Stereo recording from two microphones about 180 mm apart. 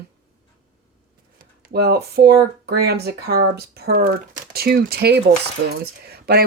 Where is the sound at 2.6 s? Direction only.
60° right (ahead or behind).